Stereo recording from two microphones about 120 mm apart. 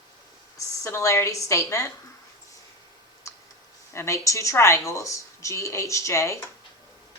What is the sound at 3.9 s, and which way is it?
Speech, 25° left (ahead or behind).